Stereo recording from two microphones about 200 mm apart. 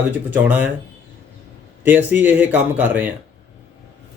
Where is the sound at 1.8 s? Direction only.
10° right (ahead or behind).